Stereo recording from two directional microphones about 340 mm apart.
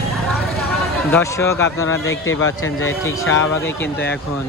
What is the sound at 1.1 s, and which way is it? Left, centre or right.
Speech, centre.